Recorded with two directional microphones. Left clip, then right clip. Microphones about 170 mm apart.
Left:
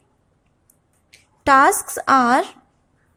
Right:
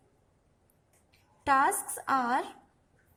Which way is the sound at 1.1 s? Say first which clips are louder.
Left 12 dB; 30° left (ahead or behind).